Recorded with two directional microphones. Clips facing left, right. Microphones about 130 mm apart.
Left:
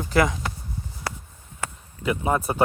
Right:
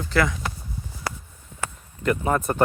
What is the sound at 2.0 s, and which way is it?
Speech, 5° left (ahead or behind).